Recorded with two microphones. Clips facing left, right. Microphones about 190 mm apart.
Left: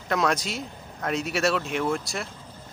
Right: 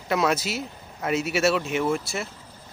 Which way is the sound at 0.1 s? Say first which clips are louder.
Right 2 dB; 5° right (ahead or behind).